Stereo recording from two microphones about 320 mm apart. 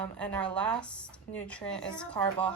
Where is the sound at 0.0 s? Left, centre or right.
Centre.